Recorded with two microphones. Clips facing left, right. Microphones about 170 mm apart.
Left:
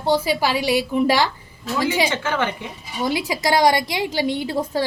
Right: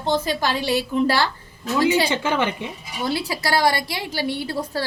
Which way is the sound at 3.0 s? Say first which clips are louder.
Left 3 dB; 15° left (ahead or behind).